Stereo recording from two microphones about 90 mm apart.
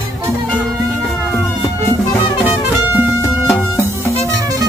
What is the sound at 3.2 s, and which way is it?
Music, 35° left (ahead or behind).